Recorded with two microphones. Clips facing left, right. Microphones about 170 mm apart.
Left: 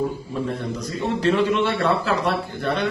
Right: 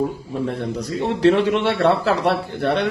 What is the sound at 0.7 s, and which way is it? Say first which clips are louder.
A man's voice: right 2 dB; 70° right (ahead or behind).